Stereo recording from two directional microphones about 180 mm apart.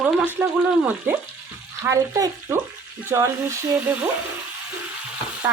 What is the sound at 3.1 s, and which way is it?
Speech, 15° right (ahead or behind).